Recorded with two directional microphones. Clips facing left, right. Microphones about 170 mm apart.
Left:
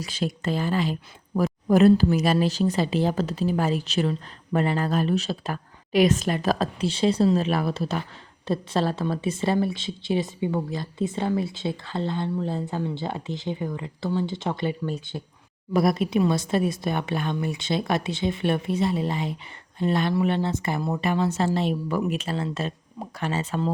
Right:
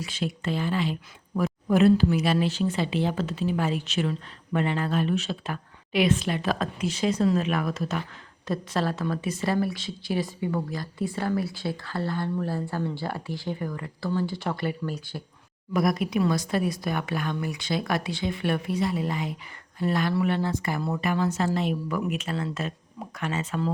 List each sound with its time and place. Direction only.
0.0 s a woman's voice: 40° left (ahead or behind)